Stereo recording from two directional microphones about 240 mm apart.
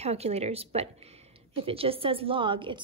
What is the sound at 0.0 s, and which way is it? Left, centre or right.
A woman's voice, right.